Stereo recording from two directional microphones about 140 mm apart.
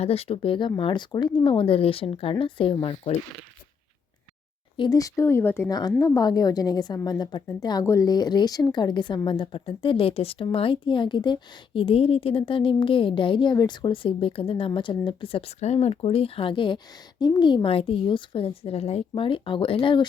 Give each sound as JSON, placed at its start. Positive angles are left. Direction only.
{"t": 0.0, "sound": "a woman's voice", "side_deg": 45}
{"t": 4.8, "sound": "speech", "side_deg": 25}
{"t": 5.6, "sound": "a woman's voice", "side_deg": 30}